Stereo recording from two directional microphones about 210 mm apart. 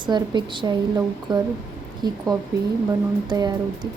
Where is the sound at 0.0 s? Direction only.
20° right (ahead or behind).